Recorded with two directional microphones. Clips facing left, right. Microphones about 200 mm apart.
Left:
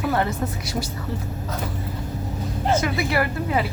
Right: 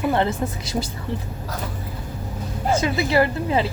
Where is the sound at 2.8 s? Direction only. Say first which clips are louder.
Right 3 dB; 25° right (ahead or behind).